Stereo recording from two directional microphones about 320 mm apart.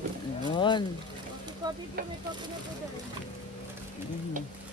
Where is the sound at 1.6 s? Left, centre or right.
Centre.